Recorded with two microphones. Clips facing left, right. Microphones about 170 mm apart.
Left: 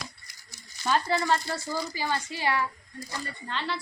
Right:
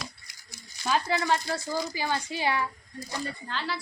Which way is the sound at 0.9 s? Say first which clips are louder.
Left 1 dB; 5° right (ahead or behind).